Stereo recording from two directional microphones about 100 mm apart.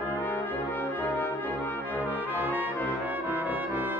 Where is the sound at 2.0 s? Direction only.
15° right (ahead or behind).